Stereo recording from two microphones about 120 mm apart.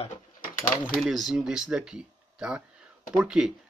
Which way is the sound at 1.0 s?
5° right (ahead or behind).